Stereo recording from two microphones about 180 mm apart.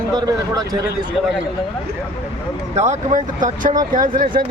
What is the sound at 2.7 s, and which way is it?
Speech, 40° right (ahead or behind).